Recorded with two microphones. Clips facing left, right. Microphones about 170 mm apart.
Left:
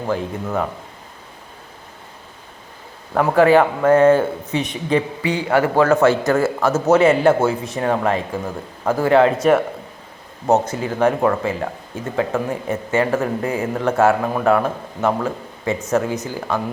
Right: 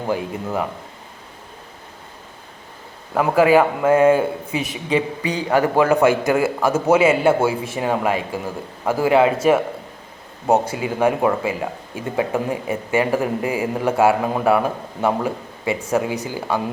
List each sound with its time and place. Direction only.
3.2 s speech: 15° right (ahead or behind)
4.9 s speech: 15° right (ahead or behind)